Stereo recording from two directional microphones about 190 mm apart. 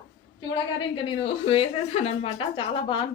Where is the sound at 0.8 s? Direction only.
25° left (ahead or behind).